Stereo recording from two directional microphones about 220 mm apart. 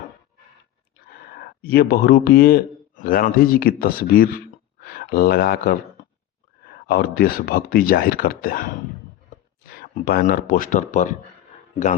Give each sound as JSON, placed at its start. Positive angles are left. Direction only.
{"t": 1.6, "sound": "a man's voice", "side_deg": 45}
{"t": 9.6, "sound": "speech", "side_deg": 40}